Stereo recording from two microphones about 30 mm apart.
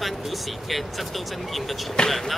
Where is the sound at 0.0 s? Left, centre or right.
Centre.